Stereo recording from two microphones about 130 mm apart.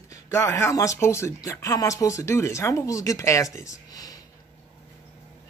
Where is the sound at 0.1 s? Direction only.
20° left (ahead or behind).